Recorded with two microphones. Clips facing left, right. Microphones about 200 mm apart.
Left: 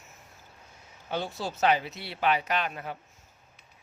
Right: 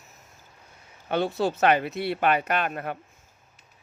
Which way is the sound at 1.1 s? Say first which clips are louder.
Right 8 dB; 60° right (ahead or behind).